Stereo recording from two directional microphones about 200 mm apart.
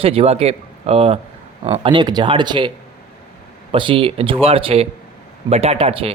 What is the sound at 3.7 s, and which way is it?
Speech, 25° right (ahead or behind).